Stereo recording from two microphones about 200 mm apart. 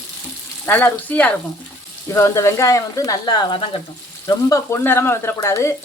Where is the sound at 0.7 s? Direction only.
10° left (ahead or behind).